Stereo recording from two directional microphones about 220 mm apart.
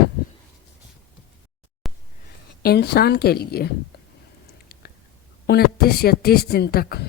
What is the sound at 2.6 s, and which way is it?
A man's voice, 45° left (ahead or behind).